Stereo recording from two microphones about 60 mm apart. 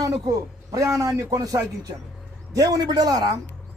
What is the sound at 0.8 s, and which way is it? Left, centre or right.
Speech, right.